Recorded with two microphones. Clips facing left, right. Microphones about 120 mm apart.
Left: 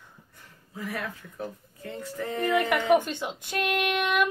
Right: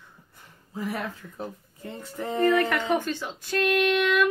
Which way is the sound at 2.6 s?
15° left (ahead or behind).